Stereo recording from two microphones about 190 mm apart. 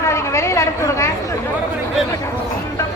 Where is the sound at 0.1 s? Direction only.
15° left (ahead or behind).